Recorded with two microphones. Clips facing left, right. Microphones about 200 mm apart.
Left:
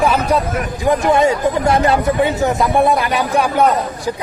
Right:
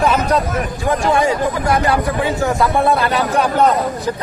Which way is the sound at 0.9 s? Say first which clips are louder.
Left 3 dB; 20° left (ahead or behind).